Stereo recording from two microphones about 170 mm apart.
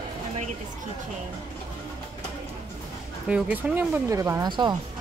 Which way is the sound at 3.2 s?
5° right (ahead or behind).